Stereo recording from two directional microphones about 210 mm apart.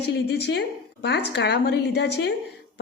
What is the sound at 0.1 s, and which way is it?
A woman's voice, 50° left (ahead or behind).